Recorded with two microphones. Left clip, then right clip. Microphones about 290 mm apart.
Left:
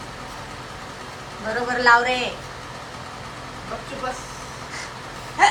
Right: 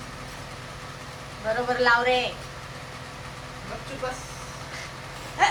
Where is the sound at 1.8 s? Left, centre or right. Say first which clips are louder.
Left 5 dB; centre.